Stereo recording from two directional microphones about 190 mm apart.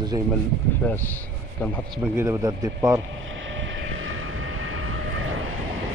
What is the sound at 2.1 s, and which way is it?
Speech, 15° right (ahead or behind).